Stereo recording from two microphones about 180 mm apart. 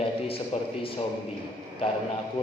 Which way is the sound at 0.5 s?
30° left (ahead or behind).